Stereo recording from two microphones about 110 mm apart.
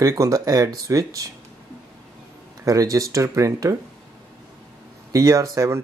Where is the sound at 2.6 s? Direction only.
30° right (ahead or behind).